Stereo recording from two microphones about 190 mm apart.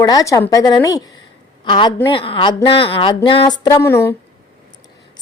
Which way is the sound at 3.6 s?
15° left (ahead or behind).